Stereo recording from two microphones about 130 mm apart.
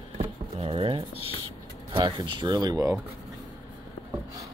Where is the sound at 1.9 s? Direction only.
35° right (ahead or behind).